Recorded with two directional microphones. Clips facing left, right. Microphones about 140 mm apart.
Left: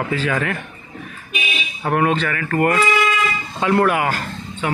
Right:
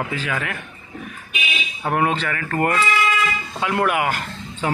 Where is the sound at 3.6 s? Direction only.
10° right (ahead or behind).